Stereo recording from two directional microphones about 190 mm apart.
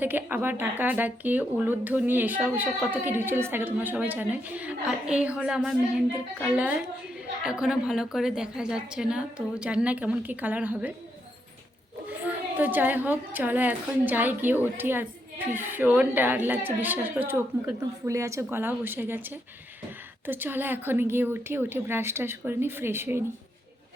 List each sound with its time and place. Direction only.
0.0 s a woman's voice: 10° right (ahead or behind)
12.2 s speech: 10° right (ahead or behind)